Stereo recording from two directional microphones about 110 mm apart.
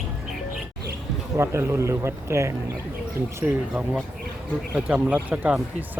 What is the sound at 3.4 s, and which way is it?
Speech, 10° right (ahead or behind).